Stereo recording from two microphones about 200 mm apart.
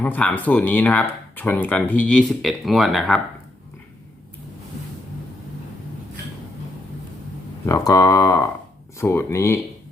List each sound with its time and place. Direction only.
0.0 s speech: 5° left (ahead or behind)
7.7 s speech: 15° left (ahead or behind)